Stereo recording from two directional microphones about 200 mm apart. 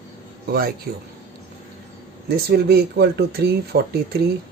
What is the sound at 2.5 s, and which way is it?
Speech, 50° right (ahead or behind).